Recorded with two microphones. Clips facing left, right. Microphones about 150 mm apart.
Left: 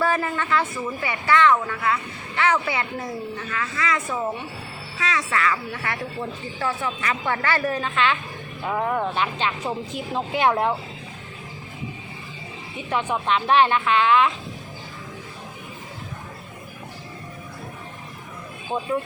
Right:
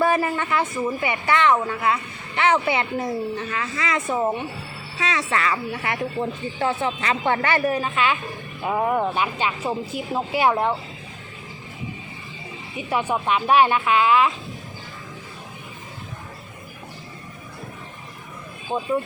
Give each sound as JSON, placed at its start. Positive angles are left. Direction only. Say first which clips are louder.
{"t": 0.0, "sound": "speech", "louder": "right 3 dB", "side_deg": -15}
{"t": 12.7, "sound": "speech", "louder": "right 2 dB", "side_deg": -10}
{"t": 18.7, "sound": "speech", "louder": "right 1 dB", "side_deg": -5}